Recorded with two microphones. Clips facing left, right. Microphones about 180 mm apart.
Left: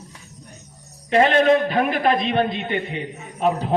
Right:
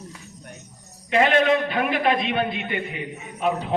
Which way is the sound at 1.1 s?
35° left (ahead or behind).